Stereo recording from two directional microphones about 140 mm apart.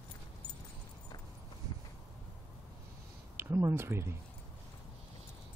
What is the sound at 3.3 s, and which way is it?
Speech, 20° right (ahead or behind).